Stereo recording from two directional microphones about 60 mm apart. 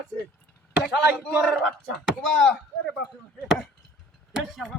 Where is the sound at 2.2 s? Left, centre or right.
Centre.